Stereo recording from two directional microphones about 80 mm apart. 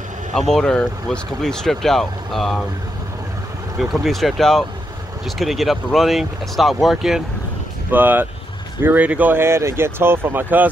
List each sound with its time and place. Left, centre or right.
0.3 s speech: centre
3.8 s speech: centre
7.9 s speech: right